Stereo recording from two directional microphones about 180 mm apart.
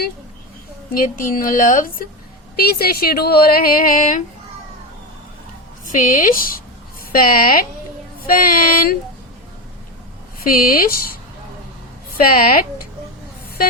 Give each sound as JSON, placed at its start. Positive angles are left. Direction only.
{"t": 0.9, "sound": "a woman's voice", "side_deg": 50}
{"t": 2.8, "sound": "speech", "side_deg": 60}
{"t": 5.9, "sound": "a woman's voice", "side_deg": 45}
{"t": 10.4, "sound": "a woman's voice", "side_deg": 50}